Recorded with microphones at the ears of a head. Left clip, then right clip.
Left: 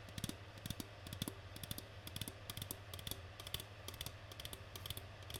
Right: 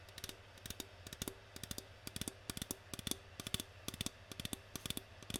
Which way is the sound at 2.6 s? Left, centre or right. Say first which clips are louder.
Right 4 dB; right.